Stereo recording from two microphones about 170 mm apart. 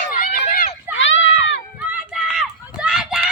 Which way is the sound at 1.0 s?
90° left.